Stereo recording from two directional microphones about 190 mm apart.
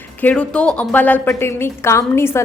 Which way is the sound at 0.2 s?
5° left (ahead or behind).